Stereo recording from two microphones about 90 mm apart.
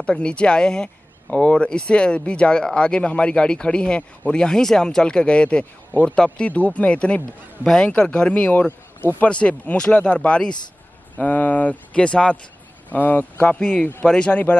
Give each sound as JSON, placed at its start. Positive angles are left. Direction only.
{"t": 0.0, "sound": "speech", "side_deg": 10}